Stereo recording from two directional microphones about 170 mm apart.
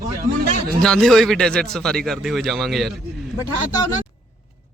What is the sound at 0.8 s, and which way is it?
A man's voice, 5° left (ahead or behind).